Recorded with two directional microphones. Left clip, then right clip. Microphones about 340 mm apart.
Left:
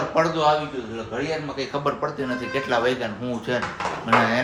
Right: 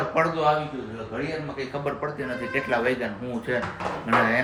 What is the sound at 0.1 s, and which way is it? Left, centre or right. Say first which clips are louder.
Speech: left 3 dB; centre.